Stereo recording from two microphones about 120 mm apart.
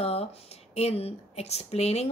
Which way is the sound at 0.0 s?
55° left (ahead or behind).